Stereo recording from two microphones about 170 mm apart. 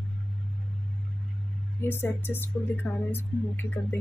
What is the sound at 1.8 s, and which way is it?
A woman's voice, 15° left (ahead or behind).